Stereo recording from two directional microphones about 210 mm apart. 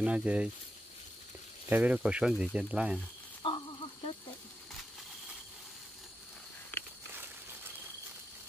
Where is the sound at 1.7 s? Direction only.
5° right (ahead or behind).